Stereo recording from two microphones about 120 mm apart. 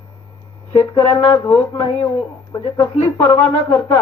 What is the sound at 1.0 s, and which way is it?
Speech, 35° left (ahead or behind).